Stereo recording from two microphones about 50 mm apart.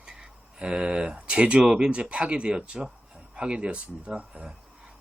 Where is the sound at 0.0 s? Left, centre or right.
Centre.